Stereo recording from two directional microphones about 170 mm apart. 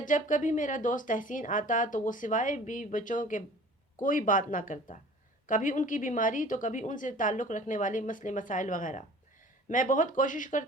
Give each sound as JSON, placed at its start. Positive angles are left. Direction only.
{"t": 0.0, "sound": "a woman's voice", "side_deg": 50}